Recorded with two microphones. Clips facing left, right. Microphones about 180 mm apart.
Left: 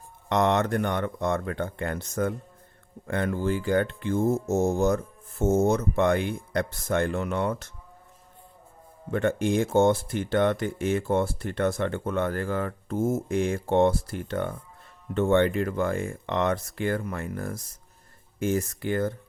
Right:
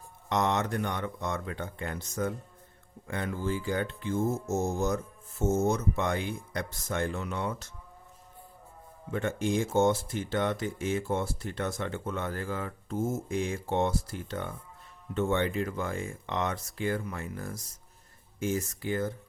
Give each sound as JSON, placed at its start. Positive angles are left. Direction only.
{"t": 0.3, "sound": "speech", "side_deg": 60}
{"t": 9.0, "sound": "speech", "side_deg": 60}